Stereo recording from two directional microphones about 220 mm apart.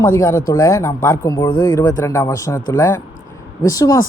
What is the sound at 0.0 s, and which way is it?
Speech, 15° left (ahead or behind).